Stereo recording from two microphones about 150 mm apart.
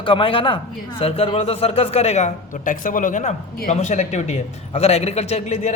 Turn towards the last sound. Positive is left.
turn(degrees=50)  # may be behind; listen again after turning